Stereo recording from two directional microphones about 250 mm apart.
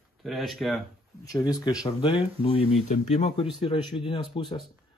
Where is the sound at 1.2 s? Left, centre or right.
Centre.